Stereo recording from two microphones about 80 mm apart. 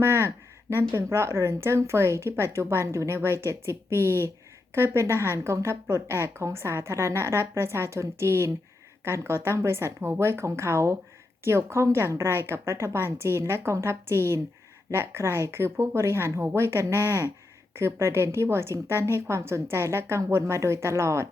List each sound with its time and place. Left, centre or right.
0.0 s a woman's voice: right